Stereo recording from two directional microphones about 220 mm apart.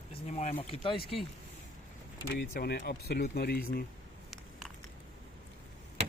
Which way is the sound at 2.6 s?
45° left (ahead or behind).